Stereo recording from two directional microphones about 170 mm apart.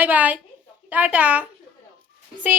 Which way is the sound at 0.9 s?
10° right (ahead or behind).